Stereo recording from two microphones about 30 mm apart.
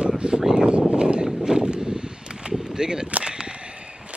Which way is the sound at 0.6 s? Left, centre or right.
Right.